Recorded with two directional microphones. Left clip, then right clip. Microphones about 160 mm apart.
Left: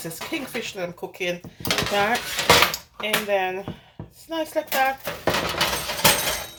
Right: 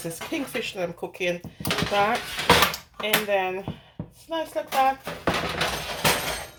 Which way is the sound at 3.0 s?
10° right (ahead or behind).